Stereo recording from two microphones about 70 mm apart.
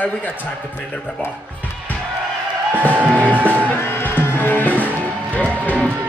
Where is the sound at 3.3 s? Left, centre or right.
Right.